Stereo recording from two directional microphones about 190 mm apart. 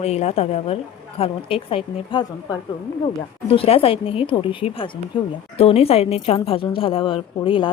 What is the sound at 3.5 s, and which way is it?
A woman's voice, 30° left (ahead or behind).